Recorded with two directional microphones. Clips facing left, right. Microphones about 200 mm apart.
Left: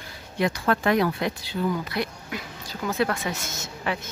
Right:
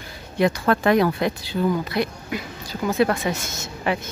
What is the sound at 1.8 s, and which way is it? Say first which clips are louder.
Speech: right 5 dB; 25° right (ahead or behind).